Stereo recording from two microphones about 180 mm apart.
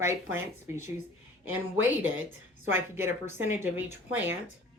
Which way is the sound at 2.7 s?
15° right (ahead or behind).